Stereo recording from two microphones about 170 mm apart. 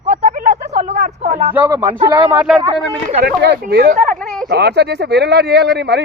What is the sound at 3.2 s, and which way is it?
Speech, 70° right (ahead or behind).